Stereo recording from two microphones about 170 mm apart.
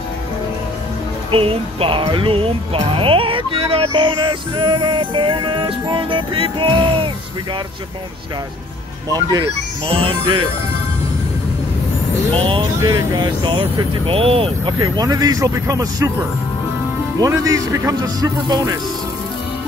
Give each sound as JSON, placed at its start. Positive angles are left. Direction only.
{"t": 1.3, "sound": "speech", "side_deg": -35}
{"t": 9.8, "sound": "speech", "side_deg": -35}
{"t": 12.4, "sound": "speech", "side_deg": -30}
{"t": 14.8, "sound": "speech", "side_deg": -25}
{"t": 17.2, "sound": "speech", "side_deg": -20}